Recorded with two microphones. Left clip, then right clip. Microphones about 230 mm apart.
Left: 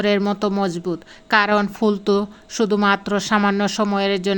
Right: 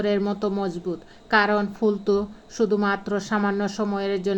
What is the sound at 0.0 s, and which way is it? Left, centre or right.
Speech, left.